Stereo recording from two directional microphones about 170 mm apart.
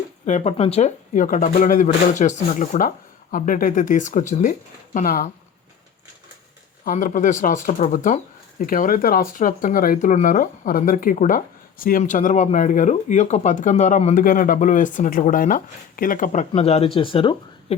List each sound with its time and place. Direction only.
0.3 s speech: 40° left (ahead or behind)
6.8 s speech: 50° left (ahead or behind)
16.5 s speech: 35° left (ahead or behind)